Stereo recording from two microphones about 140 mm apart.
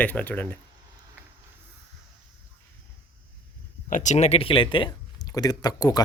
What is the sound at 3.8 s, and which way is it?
Speech, 65° left (ahead or behind).